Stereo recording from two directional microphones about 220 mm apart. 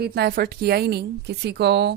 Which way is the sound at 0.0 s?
45° right (ahead or behind).